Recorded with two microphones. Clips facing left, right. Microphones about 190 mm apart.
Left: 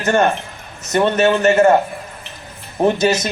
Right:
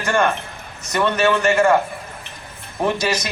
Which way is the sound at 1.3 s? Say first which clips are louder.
Left 4 dB; 25° left (ahead or behind).